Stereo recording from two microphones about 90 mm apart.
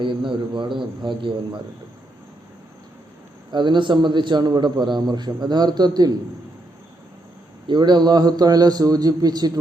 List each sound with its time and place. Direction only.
0.0 s speech: 65° right (ahead or behind)
3.5 s a man's voice: 60° right (ahead or behind)
7.7 s a man's voice: 55° right (ahead or behind)